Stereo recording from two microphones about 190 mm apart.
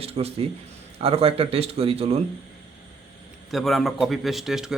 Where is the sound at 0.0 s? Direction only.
30° right (ahead or behind).